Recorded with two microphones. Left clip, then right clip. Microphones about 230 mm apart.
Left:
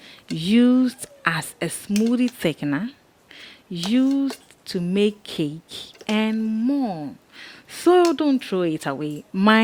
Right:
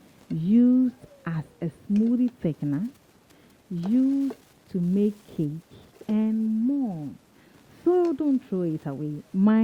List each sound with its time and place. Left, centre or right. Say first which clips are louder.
0.3 s speech: left 3 dB; centre
6.7 s a sound: left 8 dB; left
7.4 s speech: left 6 dB; centre